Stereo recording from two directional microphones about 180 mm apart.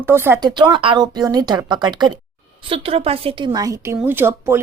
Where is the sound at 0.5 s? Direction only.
25° right (ahead or behind).